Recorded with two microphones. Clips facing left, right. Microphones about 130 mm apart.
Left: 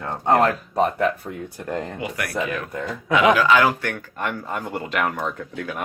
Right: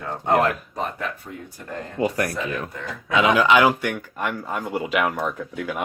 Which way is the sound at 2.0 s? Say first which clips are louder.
Right 6 dB; 35° right (ahead or behind).